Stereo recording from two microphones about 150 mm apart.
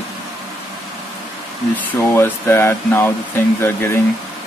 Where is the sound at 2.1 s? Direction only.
15° left (ahead or behind).